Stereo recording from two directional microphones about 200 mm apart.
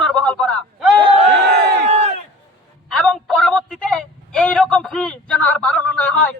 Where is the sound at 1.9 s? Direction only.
30° right (ahead or behind).